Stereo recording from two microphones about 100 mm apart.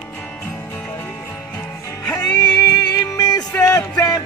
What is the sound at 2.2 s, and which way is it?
Music, 40° left (ahead or behind).